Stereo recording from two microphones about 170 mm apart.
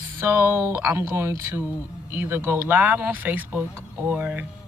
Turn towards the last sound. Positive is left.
turn(degrees=-10)  # may be behind; listen again after turning